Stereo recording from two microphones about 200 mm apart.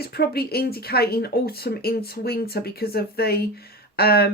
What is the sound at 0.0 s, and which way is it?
Speech, 50° left (ahead or behind).